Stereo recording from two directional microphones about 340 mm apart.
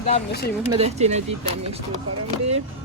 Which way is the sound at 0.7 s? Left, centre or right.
Centre.